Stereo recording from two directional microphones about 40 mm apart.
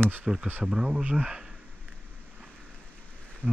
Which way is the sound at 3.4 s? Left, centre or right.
Right.